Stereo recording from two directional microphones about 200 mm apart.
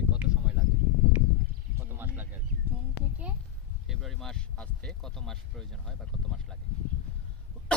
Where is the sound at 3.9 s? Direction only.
Centre (ahead or behind).